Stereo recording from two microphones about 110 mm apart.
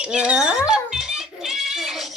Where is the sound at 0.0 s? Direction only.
10° right (ahead or behind).